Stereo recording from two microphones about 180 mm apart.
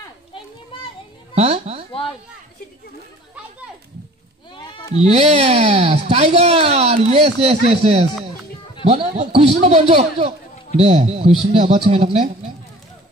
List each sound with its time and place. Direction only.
1.3 s speech: 35° right (ahead or behind)
4.6 s sheep: 25° left (ahead or behind)
5.0 s speech: 35° right (ahead or behind)